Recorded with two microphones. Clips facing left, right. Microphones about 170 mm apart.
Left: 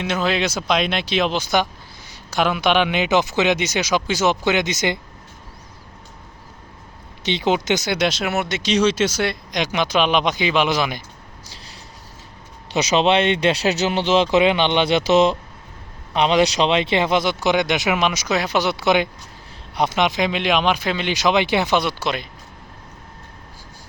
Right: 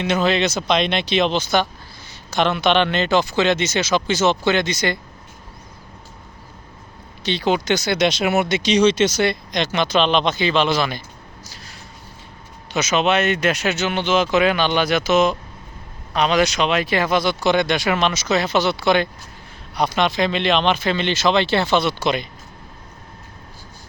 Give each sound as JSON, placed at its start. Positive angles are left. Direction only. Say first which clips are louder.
{"t": 0.0, "sound": "speech", "louder": "right 3 dB", "side_deg": 5}
{"t": 7.3, "sound": "speech", "louder": "even", "side_deg": 20}
{"t": 12.7, "sound": "speech", "louder": "left 2 dB", "side_deg": 30}